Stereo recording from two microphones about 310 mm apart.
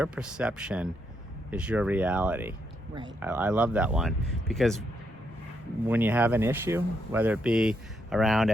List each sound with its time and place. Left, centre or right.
0.0 s speech: centre
5.9 s speech: centre